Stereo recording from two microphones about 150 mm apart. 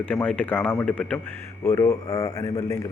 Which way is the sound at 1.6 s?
20° left (ahead or behind).